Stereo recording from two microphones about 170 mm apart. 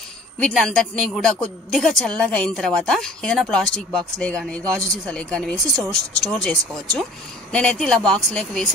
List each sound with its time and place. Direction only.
0.4 s a woman's voice: 5° left (ahead or behind)